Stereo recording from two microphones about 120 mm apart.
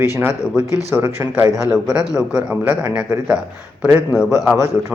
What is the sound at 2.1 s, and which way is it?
A man's voice, 10° right (ahead or behind).